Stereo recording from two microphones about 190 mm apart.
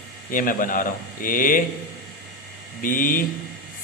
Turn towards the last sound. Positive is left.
turn(degrees=45)  # may be behind; listen again after turning